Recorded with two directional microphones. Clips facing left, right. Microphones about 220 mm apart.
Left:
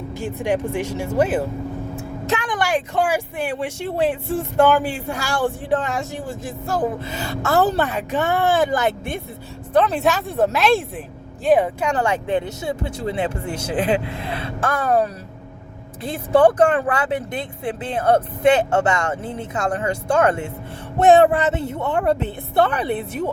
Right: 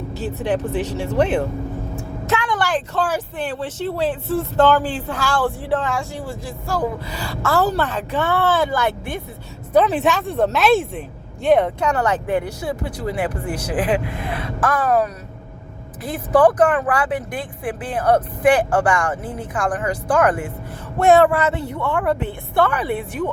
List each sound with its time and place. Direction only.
0.2 s speech: 15° left (ahead or behind)
2.3 s speech: 15° left (ahead or behind)
9.7 s speech: centre (ahead or behind); by 22.7 s 25° left (ahead or behind)